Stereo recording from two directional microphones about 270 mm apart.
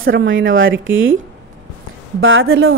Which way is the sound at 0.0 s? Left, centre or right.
Right.